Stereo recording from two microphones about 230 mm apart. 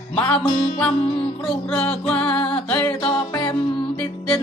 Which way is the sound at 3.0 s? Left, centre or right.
Left.